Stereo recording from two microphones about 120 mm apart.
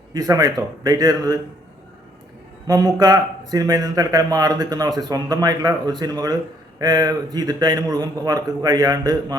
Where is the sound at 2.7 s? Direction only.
30° right (ahead or behind).